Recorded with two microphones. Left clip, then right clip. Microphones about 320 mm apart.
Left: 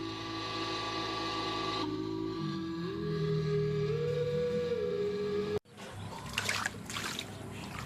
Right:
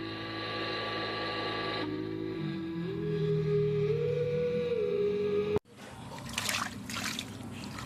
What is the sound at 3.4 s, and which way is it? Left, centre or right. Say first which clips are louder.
Music: right 5 dB; centre.